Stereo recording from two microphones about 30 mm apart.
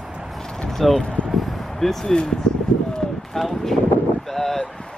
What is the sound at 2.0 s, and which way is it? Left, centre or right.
Speech, left.